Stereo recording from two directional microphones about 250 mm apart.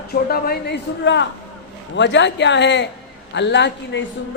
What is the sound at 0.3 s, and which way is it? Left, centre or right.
A woman's voice, left.